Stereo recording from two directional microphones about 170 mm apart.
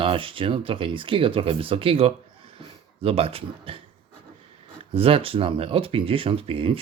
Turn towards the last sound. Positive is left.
turn(degrees=-30)  # may be behind; listen again after turning